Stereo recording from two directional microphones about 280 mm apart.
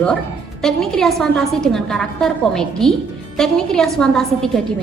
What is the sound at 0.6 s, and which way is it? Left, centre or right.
A woman's voice, centre.